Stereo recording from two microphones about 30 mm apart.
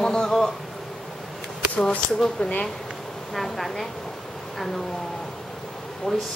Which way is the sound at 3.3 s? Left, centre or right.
Centre.